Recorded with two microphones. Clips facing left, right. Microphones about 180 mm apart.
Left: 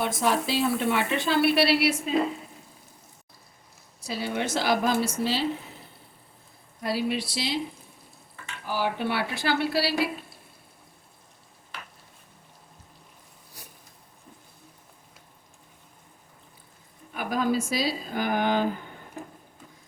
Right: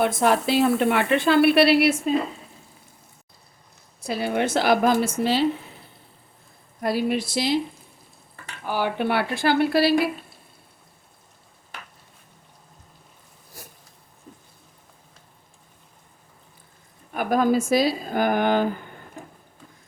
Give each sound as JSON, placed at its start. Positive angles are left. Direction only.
{"t": 0.0, "sound": "speech", "side_deg": -60}
{"t": 4.0, "sound": "speech", "side_deg": -55}
{"t": 6.8, "sound": "speech", "side_deg": -50}
{"t": 8.6, "sound": "speech", "side_deg": -60}
{"t": 13.6, "sound": "a sound", "side_deg": -45}
{"t": 17.2, "sound": "speech", "side_deg": -50}